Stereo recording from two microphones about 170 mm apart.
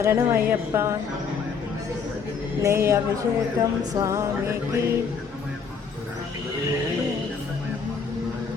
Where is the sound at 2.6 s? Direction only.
15° right (ahead or behind).